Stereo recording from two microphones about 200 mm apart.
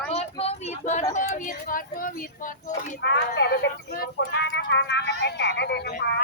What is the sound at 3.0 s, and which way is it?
Speech, 60° left (ahead or behind).